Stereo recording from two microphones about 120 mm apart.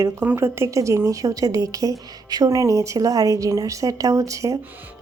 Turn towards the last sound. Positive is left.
turn(degrees=-25)  # may be behind; listen again after turning